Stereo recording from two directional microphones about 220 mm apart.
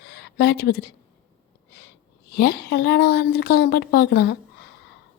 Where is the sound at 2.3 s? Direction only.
45° left (ahead or behind).